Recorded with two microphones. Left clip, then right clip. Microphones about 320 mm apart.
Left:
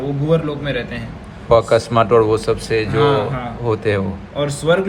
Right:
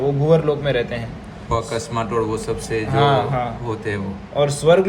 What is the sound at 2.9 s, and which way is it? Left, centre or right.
Speech, right.